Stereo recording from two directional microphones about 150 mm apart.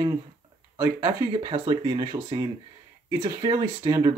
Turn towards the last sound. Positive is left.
turn(degrees=-25)  # may be behind; listen again after turning